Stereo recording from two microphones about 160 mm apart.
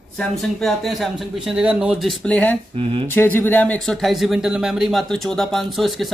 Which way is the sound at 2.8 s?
35° right (ahead or behind).